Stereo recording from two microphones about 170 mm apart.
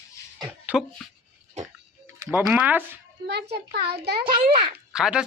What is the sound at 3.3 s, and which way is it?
A child's voice, 75° right (ahead or behind).